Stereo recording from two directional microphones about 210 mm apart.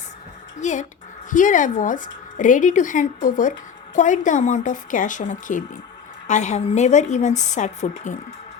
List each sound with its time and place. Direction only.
0.6 s speech: 35° left (ahead or behind)